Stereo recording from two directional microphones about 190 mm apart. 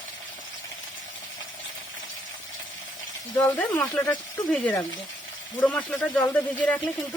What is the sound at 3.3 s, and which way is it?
Speech, 10° left (ahead or behind).